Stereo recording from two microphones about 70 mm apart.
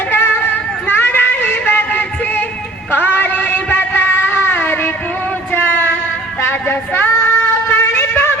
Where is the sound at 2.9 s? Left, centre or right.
Left.